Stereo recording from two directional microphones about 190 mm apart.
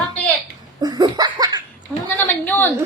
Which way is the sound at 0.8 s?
20° right (ahead or behind).